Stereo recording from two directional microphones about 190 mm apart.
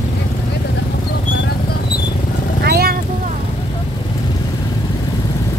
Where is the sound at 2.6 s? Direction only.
55° right (ahead or behind).